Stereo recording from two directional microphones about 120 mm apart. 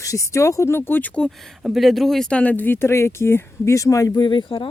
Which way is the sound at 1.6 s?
Centre (ahead or behind).